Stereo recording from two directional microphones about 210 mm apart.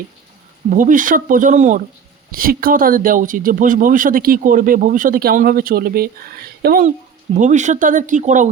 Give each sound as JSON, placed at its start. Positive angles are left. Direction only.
{"t": 0.7, "sound": "speech", "side_deg": -40}
{"t": 7.3, "sound": "speech", "side_deg": -35}